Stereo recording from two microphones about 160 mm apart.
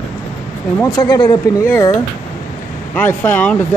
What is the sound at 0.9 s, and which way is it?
Speech, 25° left (ahead or behind).